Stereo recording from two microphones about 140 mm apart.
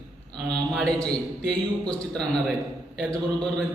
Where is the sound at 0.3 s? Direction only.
5° left (ahead or behind).